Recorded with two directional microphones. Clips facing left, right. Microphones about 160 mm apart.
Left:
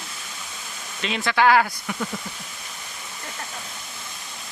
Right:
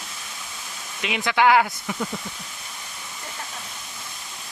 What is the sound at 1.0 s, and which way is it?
Speech, 15° right (ahead or behind).